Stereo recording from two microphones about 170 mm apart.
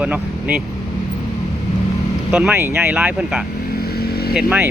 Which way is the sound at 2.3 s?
5° right (ahead or behind).